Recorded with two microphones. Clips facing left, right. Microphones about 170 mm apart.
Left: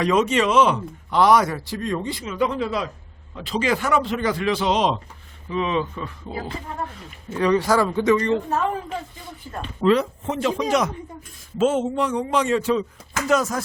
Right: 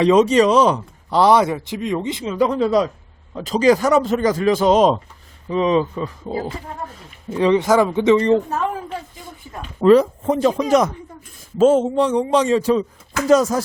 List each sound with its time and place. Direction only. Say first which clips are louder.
0.0 s a man's voice: right 6 dB; 30° right (ahead or behind)
2.2 s a man's voice: right 7 dB; 35° right (ahead or behind)
7.3 s a man's voice: right 4 dB; 25° right (ahead or behind)
9.8 s a man's voice: right 7 dB; 40° right (ahead or behind)